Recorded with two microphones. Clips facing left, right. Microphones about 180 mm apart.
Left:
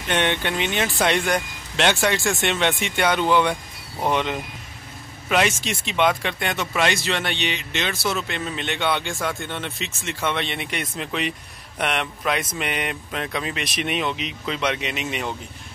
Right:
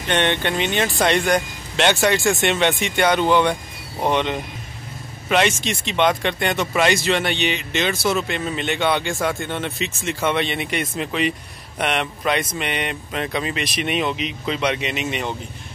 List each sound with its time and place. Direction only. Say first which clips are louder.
0.1 s speech: right 2 dB; 5° left (ahead or behind)